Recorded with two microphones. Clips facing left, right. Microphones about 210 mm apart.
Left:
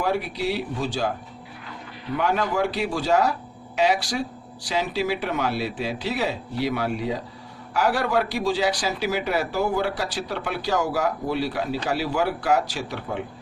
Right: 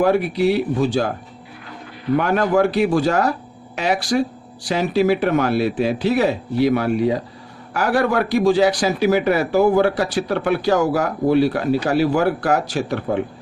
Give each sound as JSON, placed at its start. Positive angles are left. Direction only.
{"t": 0.0, "sound": "a man's voice", "side_deg": -55}
{"t": 2.1, "sound": "a man's voice", "side_deg": -55}